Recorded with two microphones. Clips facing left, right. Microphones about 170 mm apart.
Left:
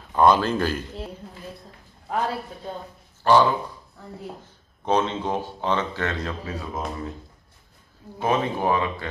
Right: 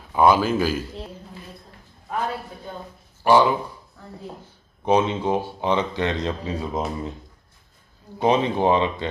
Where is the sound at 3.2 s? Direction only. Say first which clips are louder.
Right 1 dB; 15° right (ahead or behind).